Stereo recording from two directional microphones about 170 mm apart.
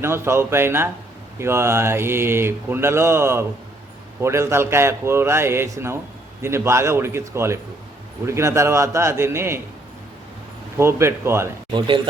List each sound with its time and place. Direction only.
0.0 s mantra: 15° right (ahead or behind)
10.8 s mantra: 15° right (ahead or behind)